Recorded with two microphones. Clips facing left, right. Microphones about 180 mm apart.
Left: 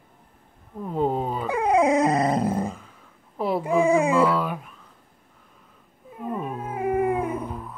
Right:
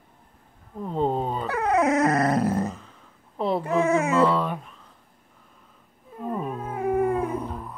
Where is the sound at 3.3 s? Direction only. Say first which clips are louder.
Even; 5° left (ahead or behind).